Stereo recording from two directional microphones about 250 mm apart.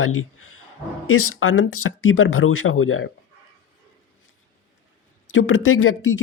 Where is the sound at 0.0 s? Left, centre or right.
Left.